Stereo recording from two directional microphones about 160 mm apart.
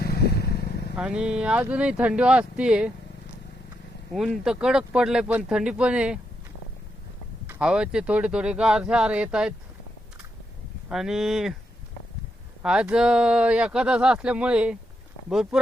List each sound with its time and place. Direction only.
0.0 s vehicle: 80° left
0.9 s speech: 5° right (ahead or behind)
4.1 s speech: centre (ahead or behind)
7.4 s speech: 5° right (ahead or behind)
10.8 s speech: 5° right (ahead or behind)
12.6 s speech: 5° right (ahead or behind)